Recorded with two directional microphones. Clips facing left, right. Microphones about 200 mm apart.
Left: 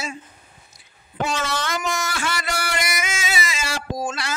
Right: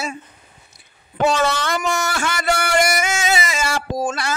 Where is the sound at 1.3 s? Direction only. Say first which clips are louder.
Right 6 dB; 60° right (ahead or behind).